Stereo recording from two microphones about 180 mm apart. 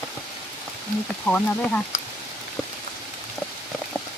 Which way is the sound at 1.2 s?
10° left (ahead or behind).